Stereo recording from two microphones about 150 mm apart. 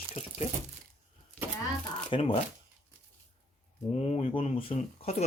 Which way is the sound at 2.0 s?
35° left (ahead or behind).